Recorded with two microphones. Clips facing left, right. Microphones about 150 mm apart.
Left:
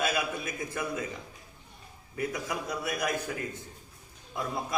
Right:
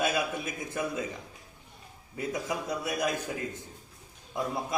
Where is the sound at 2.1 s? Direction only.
20° right (ahead or behind).